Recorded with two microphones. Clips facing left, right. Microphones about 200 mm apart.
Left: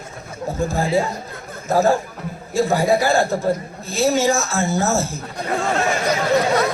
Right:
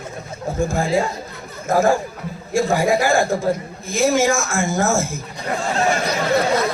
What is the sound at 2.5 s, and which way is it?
A man's voice, 10° right (ahead or behind).